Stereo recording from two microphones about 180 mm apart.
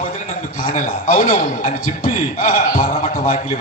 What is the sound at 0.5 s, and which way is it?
A man's voice, 45° left (ahead or behind).